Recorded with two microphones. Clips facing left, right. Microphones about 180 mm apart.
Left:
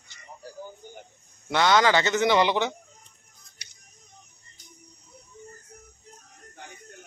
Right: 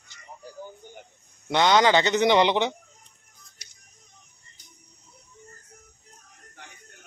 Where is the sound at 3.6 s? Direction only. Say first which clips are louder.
Left 4 dB; 75° left (ahead or behind).